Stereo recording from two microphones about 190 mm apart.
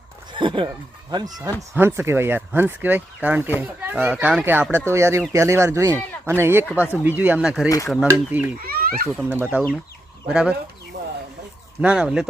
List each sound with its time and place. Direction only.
0.3 s speech: 25° right (ahead or behind); by 8.4 s 5° right (ahead or behind)
8.6 s speech: 50° right (ahead or behind)
9.1 s speech: 10° right (ahead or behind)
11.8 s speech: 5° right (ahead or behind)